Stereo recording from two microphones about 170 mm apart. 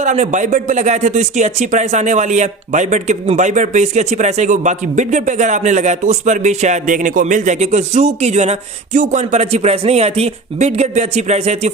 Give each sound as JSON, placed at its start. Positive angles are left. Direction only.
{"t": 0.0, "sound": "speech", "side_deg": -45}